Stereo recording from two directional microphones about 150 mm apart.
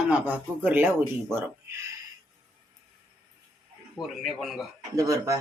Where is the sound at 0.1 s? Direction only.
10° right (ahead or behind).